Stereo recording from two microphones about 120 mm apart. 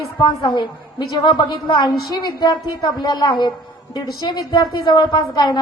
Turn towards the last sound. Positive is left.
turn(degrees=40)  # may be behind; listen again after turning